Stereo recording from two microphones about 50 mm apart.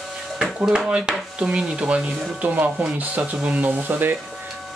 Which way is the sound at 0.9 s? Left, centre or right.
Centre.